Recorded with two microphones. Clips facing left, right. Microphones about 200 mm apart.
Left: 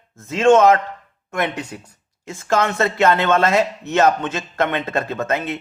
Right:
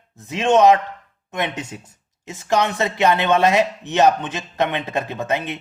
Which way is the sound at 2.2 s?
20° right (ahead or behind).